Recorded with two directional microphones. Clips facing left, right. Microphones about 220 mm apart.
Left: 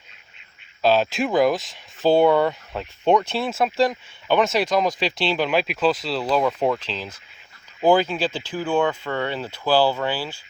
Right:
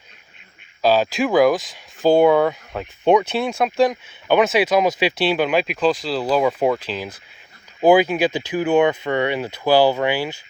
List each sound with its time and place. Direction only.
0.8 s speech: centre (ahead or behind)